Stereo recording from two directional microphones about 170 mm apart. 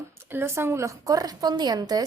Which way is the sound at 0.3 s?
15° right (ahead or behind).